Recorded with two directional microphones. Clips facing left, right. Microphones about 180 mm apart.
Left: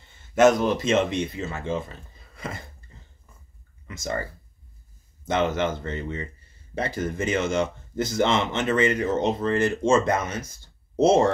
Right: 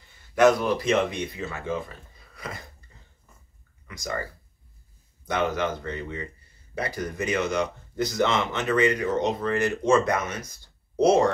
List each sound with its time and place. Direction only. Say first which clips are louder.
0.0 s speech: left 1 dB; 25° left (ahead or behind)
3.8 s speech: left 2 dB; 25° left (ahead or behind)